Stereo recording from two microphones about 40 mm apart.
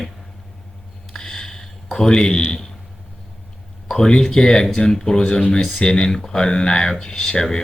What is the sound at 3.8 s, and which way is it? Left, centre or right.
Speech, centre.